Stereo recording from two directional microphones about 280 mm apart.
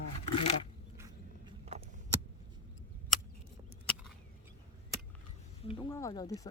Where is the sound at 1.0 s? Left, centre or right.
Centre.